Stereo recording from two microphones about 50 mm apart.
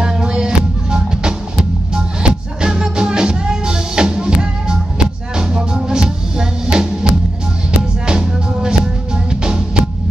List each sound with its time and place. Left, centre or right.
0.0 s music: centre
8.1 s music: centre